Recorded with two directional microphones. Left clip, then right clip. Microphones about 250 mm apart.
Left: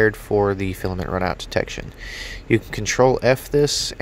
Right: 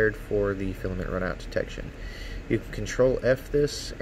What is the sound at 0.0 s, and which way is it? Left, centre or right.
Speech, left.